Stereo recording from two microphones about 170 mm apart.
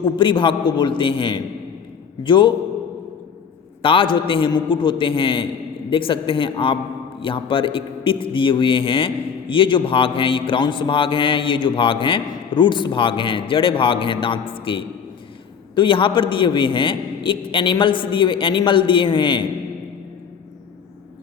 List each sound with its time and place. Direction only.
0.0 s a man's voice: 30° left (ahead or behind)
3.8 s a man's voice: 30° left (ahead or behind)